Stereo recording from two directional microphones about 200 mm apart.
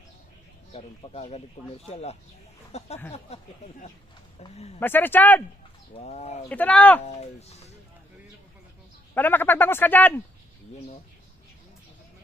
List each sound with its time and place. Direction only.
0.7 s speech: 30° left (ahead or behind)
4.8 s speech: 10° left (ahead or behind)
5.9 s speech: 35° left (ahead or behind)
6.5 s speech: 5° left (ahead or behind)
7.0 s speech: 35° left (ahead or behind)
9.1 s speech: 10° left (ahead or behind)